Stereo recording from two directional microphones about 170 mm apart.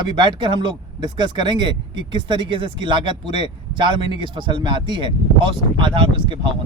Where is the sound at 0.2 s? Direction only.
25° right (ahead or behind).